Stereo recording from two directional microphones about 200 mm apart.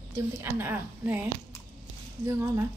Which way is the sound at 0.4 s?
10° right (ahead or behind).